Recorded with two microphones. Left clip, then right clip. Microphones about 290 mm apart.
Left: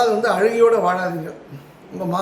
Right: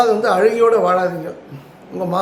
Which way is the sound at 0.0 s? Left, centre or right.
Centre.